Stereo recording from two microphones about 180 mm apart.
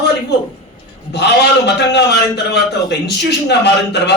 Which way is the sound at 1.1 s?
70° left (ahead or behind).